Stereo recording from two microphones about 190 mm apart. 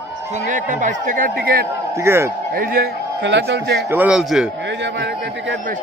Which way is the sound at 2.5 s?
50° right (ahead or behind).